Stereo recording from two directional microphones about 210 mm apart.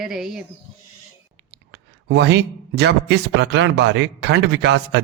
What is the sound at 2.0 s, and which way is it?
A man's voice, 55° right (ahead or behind).